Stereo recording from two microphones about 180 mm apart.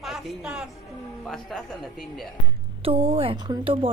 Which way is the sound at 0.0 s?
Centre (ahead or behind).